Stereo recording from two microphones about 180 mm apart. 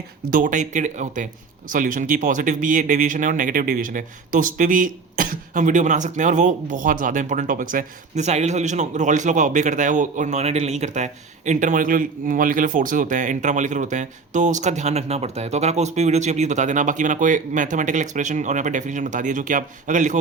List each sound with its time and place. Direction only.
0.3 s speech: 50° right (ahead or behind)